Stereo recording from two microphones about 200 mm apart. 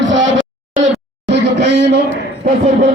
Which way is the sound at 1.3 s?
60° right (ahead or behind).